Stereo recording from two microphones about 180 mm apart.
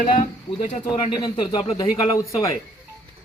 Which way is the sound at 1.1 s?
25° left (ahead or behind).